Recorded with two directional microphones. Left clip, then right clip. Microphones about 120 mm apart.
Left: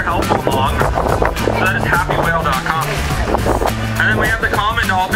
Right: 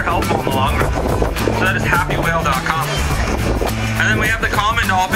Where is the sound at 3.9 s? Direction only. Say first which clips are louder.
Left 1 dB; 15° right (ahead or behind).